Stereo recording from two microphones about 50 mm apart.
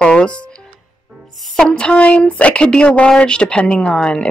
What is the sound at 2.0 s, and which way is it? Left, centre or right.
A woman's voice, left.